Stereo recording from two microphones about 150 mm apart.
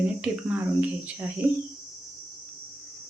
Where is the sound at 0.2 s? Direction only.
10° right (ahead or behind).